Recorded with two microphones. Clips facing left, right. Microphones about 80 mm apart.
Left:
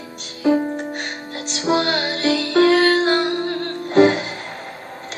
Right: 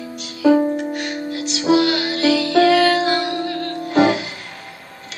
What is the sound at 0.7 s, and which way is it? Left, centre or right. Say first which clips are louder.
Music: right 4 dB; left.